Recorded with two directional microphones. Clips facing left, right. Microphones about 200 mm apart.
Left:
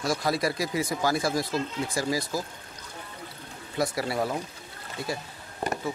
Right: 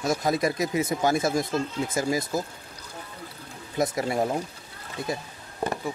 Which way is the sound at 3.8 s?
20° right (ahead or behind).